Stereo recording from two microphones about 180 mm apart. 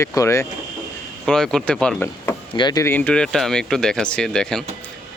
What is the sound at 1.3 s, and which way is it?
Speech, 5° left (ahead or behind).